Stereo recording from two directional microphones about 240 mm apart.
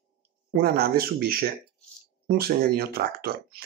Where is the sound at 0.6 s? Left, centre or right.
Right.